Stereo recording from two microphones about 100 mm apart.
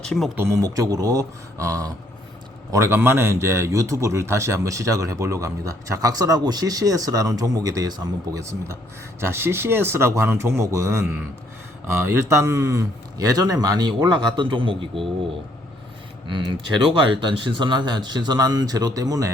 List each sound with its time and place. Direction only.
0.0 s speech: 5° left (ahead or behind)
0.3 s a man's voice: 30° right (ahead or behind); by 15.0 s 60° right (ahead or behind)
16.2 s speech: 55° right (ahead or behind); by 19.3 s 35° right (ahead or behind)